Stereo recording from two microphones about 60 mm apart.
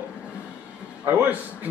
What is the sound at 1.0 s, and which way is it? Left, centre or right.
Speech, right.